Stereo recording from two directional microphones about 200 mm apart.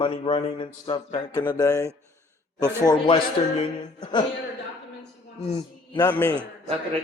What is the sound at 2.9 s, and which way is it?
A man's voice, 30° left (ahead or behind).